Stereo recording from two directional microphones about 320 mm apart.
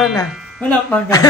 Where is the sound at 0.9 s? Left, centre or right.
Centre.